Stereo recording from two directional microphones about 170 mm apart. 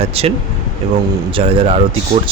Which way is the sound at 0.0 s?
35° right (ahead or behind).